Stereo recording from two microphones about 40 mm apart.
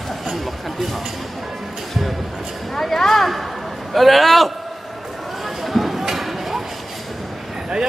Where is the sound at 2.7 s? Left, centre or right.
Centre.